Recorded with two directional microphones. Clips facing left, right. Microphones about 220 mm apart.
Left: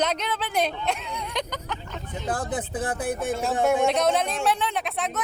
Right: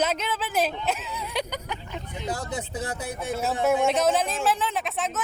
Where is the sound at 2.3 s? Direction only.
50° left (ahead or behind).